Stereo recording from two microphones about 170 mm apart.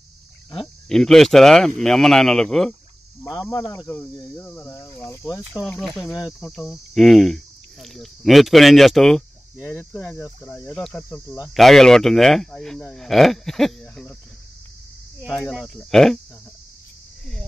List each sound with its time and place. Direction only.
0.6 s speech: 5° left (ahead or behind)
3.3 s cricket: 15° left (ahead or behind)
5.5 s speech: 5° right (ahead or behind)
9.6 s cricket: 10° left (ahead or behind)
11.3 s speech: centre (ahead or behind)
15.2 s speech: 5° left (ahead or behind)